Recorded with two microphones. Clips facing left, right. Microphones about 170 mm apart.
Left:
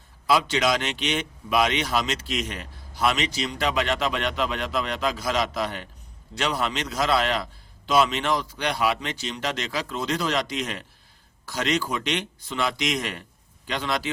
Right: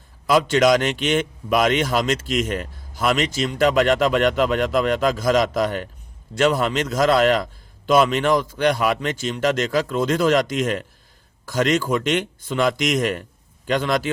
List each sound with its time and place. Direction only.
0.3 s speech: 50° right (ahead or behind)